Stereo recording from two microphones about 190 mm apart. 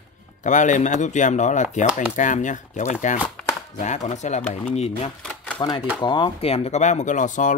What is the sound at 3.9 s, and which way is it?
Speech, 40° left (ahead or behind).